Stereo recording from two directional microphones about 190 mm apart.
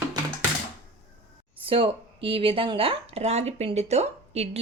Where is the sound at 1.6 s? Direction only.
30° right (ahead or behind).